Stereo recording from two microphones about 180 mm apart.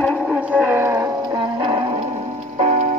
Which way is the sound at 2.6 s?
40° right (ahead or behind).